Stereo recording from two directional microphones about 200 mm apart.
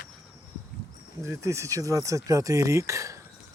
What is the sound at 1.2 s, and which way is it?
Speech, 15° right (ahead or behind).